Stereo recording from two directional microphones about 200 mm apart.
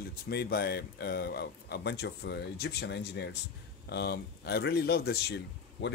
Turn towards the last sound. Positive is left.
turn(degrees=55)  # may be behind; listen again after turning